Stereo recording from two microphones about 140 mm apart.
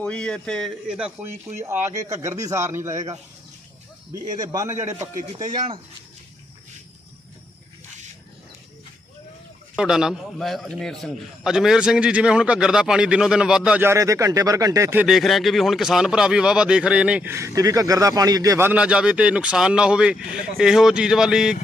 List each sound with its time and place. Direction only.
0.0 s speech: 5° left (ahead or behind)
0.9 s speech: 5° right (ahead or behind)
1.8 s speech: 20° right (ahead or behind)
4.1 s speech: 25° right (ahead or behind)
5.4 s speech: 35° right (ahead or behind)
9.7 s a man's voice: 5° right (ahead or behind); by 15.0 s 20° right (ahead or behind)
15.0 s speech: centre (ahead or behind); by 18.7 s 25° right (ahead or behind)
18.7 s speech: 10° right (ahead or behind)